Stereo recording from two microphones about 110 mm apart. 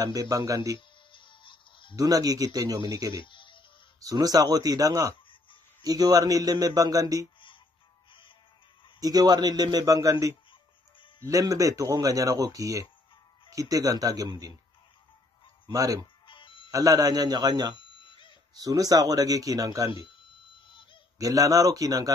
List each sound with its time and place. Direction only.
0.0 s speech: 35° right (ahead or behind)
0.7 s music: 50° left (ahead or behind)
2.0 s speech: 35° right (ahead or behind)
3.2 s a sound: 50° left (ahead or behind)
4.0 s speech: 35° right (ahead or behind)
9.0 s speech: 35° right (ahead or behind)
15.6 s speech: 30° right (ahead or behind)
16.3 s music: 50° left (ahead or behind)
16.7 s speech: 30° right (ahead or behind)
17.7 s a sound: 50° left (ahead or behind)
18.6 s speech: 35° right (ahead or behind)
20.2 s alarm clock: 50° left (ahead or behind)
21.2 s speech: 30° right (ahead or behind)